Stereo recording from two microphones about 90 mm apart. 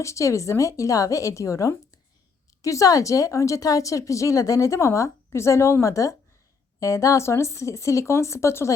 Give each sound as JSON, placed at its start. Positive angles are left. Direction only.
{"t": 0.0, "sound": "speech", "side_deg": 35}